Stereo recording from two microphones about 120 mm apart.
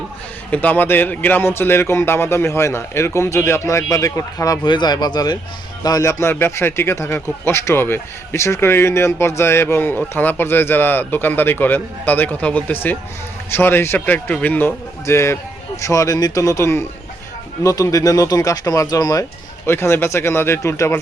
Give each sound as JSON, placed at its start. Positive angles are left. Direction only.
{"t": 0.5, "sound": "a man's voice", "side_deg": 15}
{"t": 19.6, "sound": "a man's voice", "side_deg": 20}